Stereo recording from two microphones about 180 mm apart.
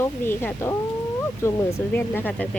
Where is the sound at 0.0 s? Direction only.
15° left (ahead or behind).